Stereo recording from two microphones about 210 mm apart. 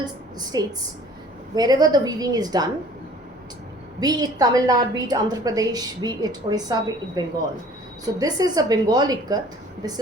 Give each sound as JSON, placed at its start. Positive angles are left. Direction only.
{"t": 0.0, "sound": "a woman's voice", "side_deg": -20}
{"t": 4.0, "sound": "a woman's voice", "side_deg": -20}